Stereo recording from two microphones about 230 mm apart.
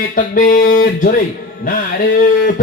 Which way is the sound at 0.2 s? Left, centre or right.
Left.